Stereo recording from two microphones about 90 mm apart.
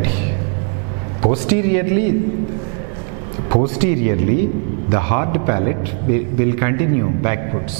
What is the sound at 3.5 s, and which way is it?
A man's voice, 15° right (ahead or behind).